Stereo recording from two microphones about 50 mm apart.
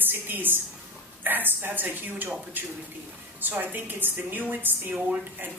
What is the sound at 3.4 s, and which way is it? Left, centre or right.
A woman's voice, right.